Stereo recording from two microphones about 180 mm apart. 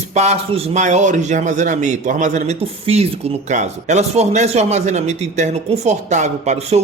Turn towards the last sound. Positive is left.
turn(degrees=-40)  # may be behind; listen again after turning